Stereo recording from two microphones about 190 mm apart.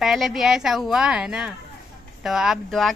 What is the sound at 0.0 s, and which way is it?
Speech, centre (ahead or behind).